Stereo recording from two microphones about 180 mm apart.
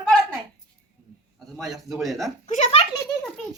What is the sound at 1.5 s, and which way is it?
Speech, centre (ahead or behind).